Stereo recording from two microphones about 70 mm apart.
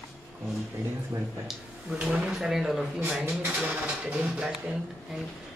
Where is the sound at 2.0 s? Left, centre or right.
Centre.